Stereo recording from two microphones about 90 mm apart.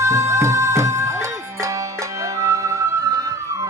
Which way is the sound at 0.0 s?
35° right (ahead or behind).